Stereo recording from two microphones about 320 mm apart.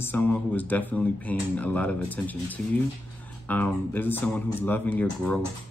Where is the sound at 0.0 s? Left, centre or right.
Centre.